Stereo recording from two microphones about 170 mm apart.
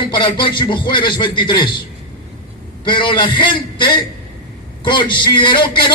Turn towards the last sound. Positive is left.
turn(degrees=25)  # may be behind; listen again after turning